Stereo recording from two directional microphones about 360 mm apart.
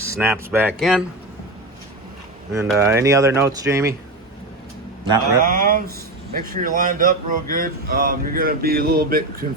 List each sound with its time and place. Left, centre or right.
0.2 s speech: centre
2.5 s speech: centre
5.4 s speech: right